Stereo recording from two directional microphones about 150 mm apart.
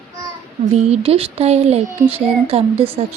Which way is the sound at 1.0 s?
40° right (ahead or behind).